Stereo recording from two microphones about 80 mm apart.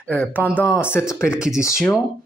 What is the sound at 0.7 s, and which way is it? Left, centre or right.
Speech, left.